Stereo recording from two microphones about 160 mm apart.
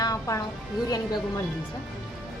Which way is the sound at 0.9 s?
25° left (ahead or behind).